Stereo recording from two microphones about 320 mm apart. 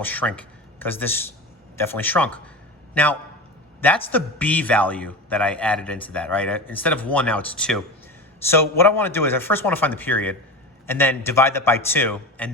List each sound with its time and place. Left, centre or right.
0.0 s a man's voice: centre